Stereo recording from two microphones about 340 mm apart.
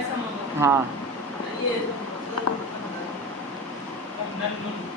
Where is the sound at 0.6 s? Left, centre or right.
Centre.